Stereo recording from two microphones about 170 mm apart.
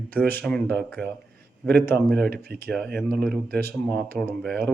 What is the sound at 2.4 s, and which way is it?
Speech, 65° right (ahead or behind).